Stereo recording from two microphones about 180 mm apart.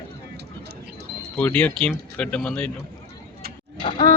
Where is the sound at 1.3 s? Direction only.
10° left (ahead or behind).